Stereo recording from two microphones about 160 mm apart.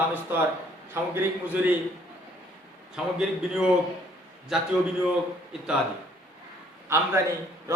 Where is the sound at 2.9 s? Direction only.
5° right (ahead or behind).